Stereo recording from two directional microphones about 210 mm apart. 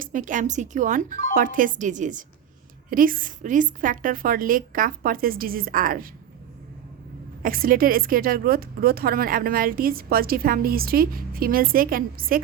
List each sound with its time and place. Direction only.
0.0 s a woman's voice: 40° right (ahead or behind)
7.4 s speech: 45° right (ahead or behind)